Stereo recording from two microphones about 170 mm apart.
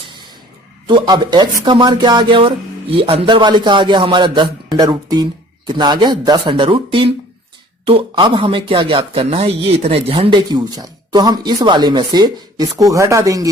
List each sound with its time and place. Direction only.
0.9 s speech: 25° right (ahead or behind)